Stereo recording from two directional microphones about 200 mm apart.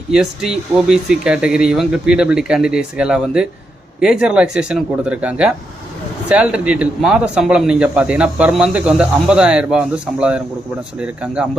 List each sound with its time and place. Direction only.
0.1 s speech: 5° right (ahead or behind)